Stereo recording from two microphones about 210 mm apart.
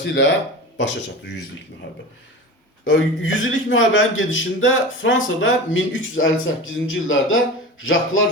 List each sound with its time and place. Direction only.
0.0 s speech: 60° left (ahead or behind)
2.8 s a man's voice: 70° left (ahead or behind)